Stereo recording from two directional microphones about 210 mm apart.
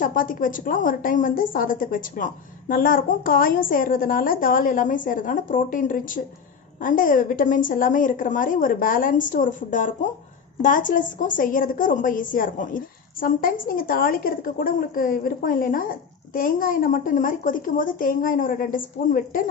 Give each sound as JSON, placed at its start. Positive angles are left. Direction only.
{"t": 0.0, "sound": "a woman's voice", "side_deg": 40}